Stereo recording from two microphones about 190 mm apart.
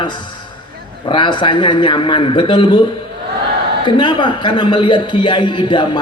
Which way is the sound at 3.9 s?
25° left (ahead or behind).